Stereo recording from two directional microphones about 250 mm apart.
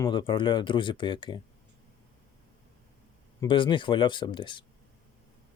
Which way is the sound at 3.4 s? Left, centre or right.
Centre.